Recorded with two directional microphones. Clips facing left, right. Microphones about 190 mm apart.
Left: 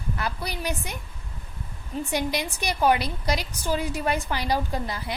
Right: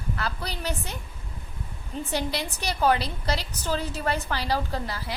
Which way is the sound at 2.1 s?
15° left (ahead or behind).